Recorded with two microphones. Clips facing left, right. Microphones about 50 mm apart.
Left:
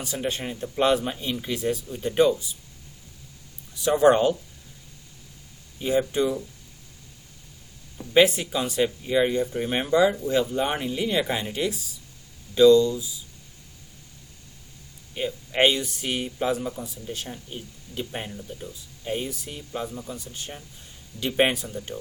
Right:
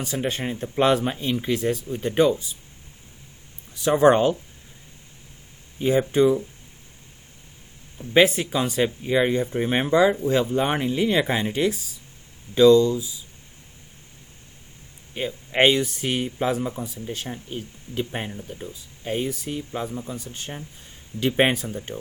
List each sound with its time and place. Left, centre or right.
0.2 s speech: right
0.8 s speech: right
3.8 s speech: right
5.8 s speech: right
8.1 s speech: right
15.1 s speech: right
17.9 s speech: right